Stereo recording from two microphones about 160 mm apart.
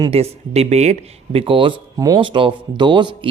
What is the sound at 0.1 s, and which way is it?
Speech, 40° right (ahead or behind).